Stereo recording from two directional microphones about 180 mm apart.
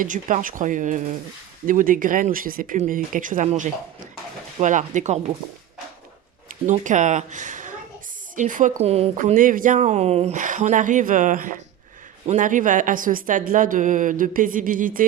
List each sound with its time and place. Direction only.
0.0 s speech: 45° right (ahead or behind)
6.5 s speech: 45° right (ahead or behind)